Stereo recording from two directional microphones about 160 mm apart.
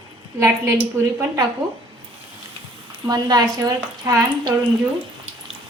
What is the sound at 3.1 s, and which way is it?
A woman's voice, 25° right (ahead or behind).